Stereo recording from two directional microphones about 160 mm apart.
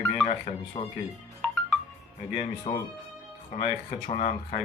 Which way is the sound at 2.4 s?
40° left (ahead or behind).